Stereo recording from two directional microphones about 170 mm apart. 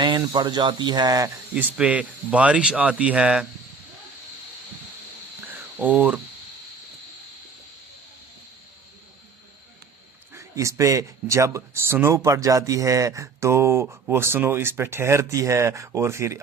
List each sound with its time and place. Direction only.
0.0 s speech: 25° right (ahead or behind)
1.5 s speech: 10° right (ahead or behind)
5.5 s a sound: 10° right (ahead or behind)
10.3 s speech: 15° right (ahead or behind)